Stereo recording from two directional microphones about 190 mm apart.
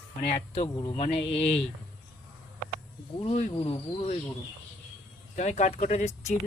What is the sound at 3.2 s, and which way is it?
Speech, 35° left (ahead or behind).